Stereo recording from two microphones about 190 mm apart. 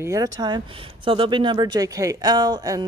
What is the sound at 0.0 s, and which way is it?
Speech, 20° right (ahead or behind).